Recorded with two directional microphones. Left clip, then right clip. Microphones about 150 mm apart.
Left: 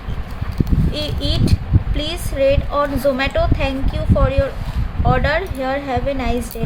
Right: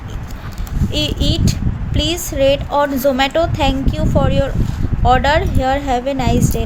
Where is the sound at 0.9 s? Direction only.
30° right (ahead or behind).